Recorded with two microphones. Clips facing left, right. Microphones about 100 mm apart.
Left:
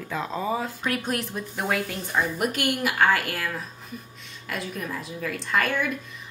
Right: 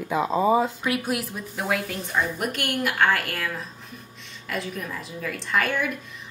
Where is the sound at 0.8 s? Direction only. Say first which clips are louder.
Right 2 dB; 5° right (ahead or behind).